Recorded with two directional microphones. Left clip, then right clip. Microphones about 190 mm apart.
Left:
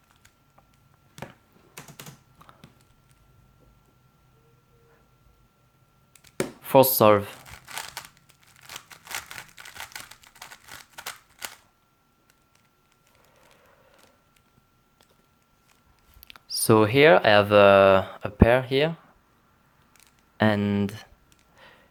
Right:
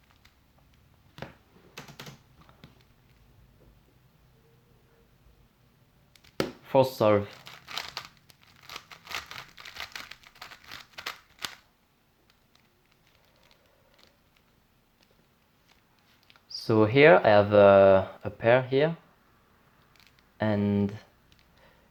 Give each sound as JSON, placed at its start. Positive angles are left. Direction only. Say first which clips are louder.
{"t": 6.6, "sound": "speech", "louder": "left 6 dB", "side_deg": 30}
{"t": 8.9, "sound": "crumpling", "louder": "left 1 dB", "side_deg": 10}
{"t": 16.2, "sound": "speech", "louder": "left 8 dB", "side_deg": 35}
{"t": 20.4, "sound": "a sound", "louder": "left 4 dB", "side_deg": 35}